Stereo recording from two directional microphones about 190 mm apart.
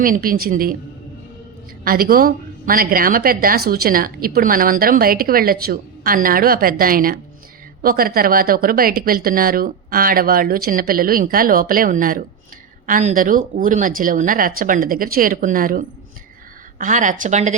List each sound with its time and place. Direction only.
0.0 s a woman's voice: 50° right (ahead or behind)
1.8 s a woman's voice: 50° right (ahead or behind)